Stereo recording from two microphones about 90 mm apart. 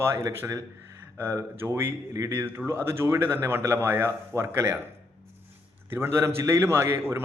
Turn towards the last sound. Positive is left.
turn(degrees=-30)  # may be behind; listen again after turning